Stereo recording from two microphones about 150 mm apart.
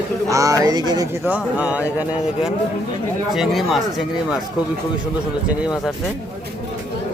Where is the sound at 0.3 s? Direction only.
20° right (ahead or behind).